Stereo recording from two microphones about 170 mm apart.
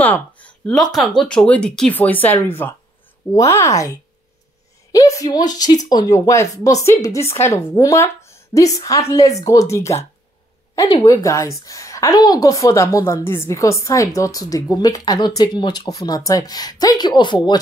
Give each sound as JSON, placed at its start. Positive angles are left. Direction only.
{"t": 0.0, "sound": "a woman's voice", "side_deg": 10}